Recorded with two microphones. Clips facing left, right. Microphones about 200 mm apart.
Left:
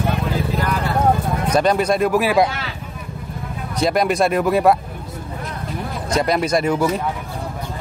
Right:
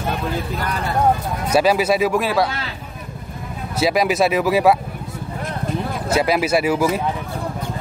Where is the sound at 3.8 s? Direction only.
5° right (ahead or behind).